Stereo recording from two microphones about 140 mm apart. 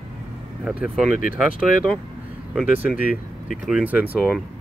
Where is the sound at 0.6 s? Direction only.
5° right (ahead or behind).